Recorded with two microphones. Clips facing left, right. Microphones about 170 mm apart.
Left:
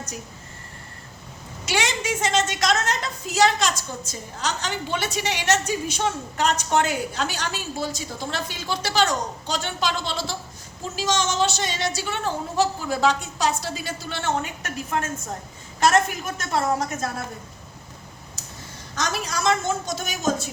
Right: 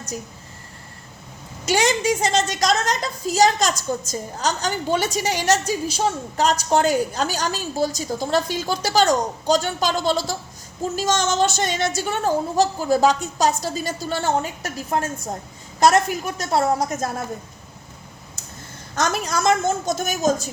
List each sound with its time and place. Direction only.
1.6 s a woman's voice: 40° right (ahead or behind)
18.9 s a woman's voice: 50° right (ahead or behind)